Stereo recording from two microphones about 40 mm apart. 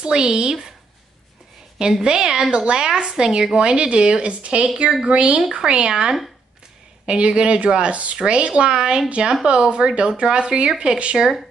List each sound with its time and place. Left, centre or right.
0.0 s speech: centre
2.0 s speech: centre